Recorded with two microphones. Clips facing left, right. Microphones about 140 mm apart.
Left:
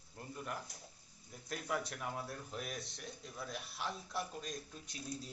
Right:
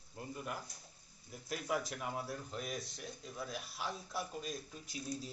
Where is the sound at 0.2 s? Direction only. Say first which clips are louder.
Right 1 dB; 5° right (ahead or behind).